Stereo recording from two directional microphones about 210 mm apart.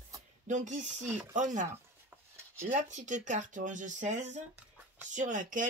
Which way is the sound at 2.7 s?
35° right (ahead or behind).